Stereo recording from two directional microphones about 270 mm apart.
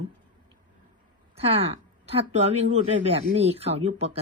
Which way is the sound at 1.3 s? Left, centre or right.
Right.